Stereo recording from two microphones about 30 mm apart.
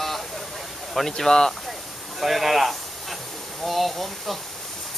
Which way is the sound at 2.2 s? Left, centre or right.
Centre.